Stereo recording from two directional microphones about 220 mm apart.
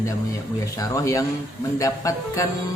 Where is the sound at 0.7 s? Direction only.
15° left (ahead or behind).